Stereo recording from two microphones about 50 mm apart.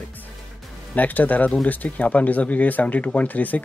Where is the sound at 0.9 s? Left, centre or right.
Left.